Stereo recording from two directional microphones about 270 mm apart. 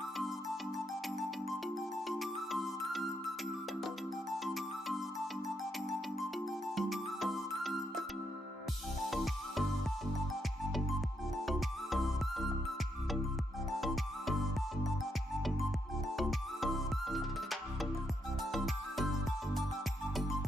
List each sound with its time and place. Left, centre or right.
1.5 s music: centre
4.3 s music: centre
6.7 s music: centre
9.0 s music: centre
11.4 s music: centre
13.7 s music: centre
16.1 s music: centre